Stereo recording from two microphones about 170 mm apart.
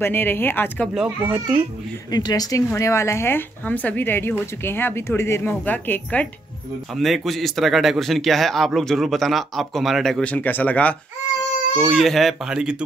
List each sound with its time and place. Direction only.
0.0 s speech: 10° left (ahead or behind)
0.9 s speech: 10° right (ahead or behind)
2.0 s speech: 25° left (ahead or behind)
7.0 s a man's voice: centre (ahead or behind)